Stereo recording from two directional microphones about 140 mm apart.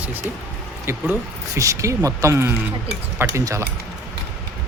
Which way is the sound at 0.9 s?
15° right (ahead or behind).